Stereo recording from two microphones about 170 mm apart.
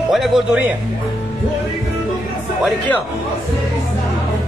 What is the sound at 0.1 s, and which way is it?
Speech, centre (ahead or behind).